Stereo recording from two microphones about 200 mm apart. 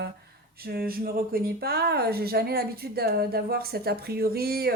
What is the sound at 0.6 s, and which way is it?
Speech, 50° right (ahead or behind).